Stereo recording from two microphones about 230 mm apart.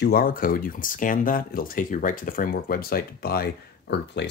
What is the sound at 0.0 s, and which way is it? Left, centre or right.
Speech, left.